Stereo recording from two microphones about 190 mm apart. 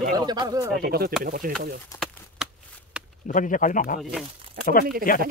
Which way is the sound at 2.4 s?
5° right (ahead or behind).